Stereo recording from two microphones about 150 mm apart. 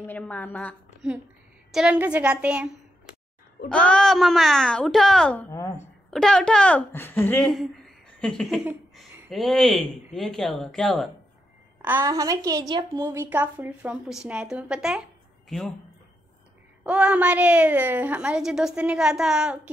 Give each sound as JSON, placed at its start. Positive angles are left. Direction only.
{"t": 0.0, "sound": "a woman's voice", "side_deg": 10}
{"t": 0.8, "sound": "a sound", "side_deg": -10}
{"t": 1.7, "sound": "a woman's voice", "side_deg": -5}
{"t": 3.6, "sound": "a woman's voice", "side_deg": 5}
{"t": 11.8, "sound": "a woman's voice", "side_deg": -15}
{"t": 16.8, "sound": "a woman's voice", "side_deg": -10}